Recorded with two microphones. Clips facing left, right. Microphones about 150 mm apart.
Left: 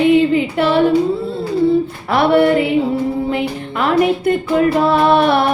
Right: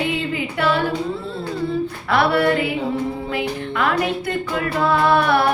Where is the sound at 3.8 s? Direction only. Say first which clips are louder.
Left 7 dB; 25° left (ahead or behind).